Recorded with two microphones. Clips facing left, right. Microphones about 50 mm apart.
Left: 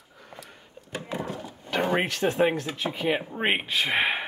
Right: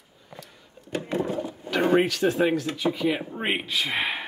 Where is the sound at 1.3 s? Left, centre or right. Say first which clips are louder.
Right 6 dB; centre.